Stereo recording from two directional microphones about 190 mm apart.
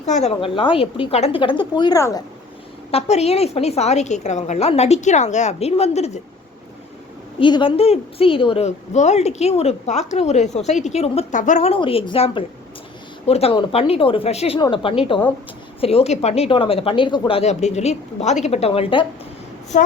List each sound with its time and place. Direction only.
0.0 s a woman's voice: 35° left (ahead or behind); by 2.2 s 20° left (ahead or behind)
2.9 s a woman's voice: 35° left (ahead or behind)
7.3 s a woman's voice: 25° left (ahead or behind)
19.7 s a woman's voice: 40° left (ahead or behind)